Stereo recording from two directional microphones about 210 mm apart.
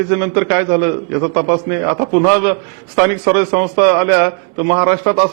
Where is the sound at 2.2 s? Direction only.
15° right (ahead or behind).